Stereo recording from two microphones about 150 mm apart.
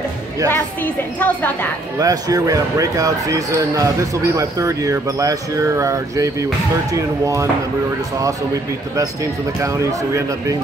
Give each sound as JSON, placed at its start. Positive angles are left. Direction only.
{"t": 0.5, "sound": "a woman's voice", "side_deg": 10}
{"t": 2.0, "sound": "speech", "side_deg": -25}
{"t": 9.6, "sound": "speech", "side_deg": -20}